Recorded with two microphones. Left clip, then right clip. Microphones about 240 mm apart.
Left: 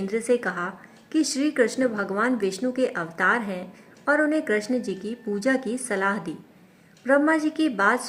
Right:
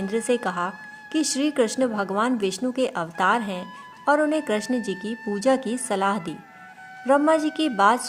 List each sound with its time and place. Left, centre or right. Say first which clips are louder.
0.1 s speech: even; right